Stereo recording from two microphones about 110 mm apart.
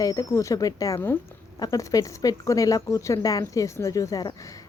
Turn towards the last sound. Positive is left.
turn(degrees=30)  # may be behind; listen again after turning